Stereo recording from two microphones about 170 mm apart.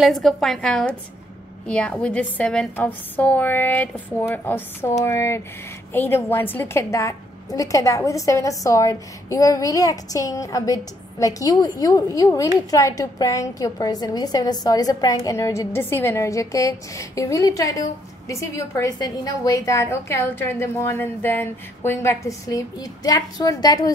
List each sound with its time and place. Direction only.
0.0 s a woman's voice: centre (ahead or behind); by 23.9 s 20° left (ahead or behind)